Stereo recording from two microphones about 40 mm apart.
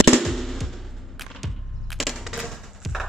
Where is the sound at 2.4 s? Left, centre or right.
Centre.